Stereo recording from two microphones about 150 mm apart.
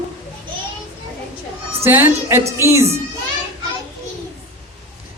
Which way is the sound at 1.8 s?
15° right (ahead or behind).